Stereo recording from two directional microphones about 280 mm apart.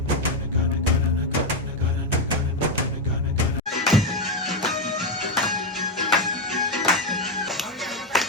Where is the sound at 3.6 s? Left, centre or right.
Centre.